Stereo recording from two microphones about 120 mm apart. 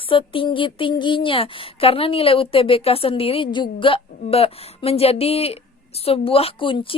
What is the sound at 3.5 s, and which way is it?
Speech, 40° left (ahead or behind).